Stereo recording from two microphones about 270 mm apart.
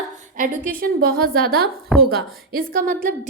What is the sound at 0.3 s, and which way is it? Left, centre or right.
A woman's voice, right.